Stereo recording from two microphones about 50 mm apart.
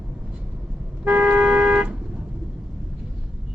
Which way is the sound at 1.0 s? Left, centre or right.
Right.